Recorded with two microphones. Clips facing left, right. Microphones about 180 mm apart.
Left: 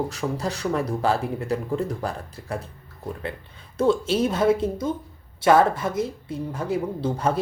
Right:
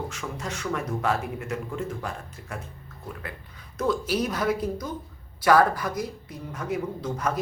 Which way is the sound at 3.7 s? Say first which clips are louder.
Left 5 dB; 30° left (ahead or behind).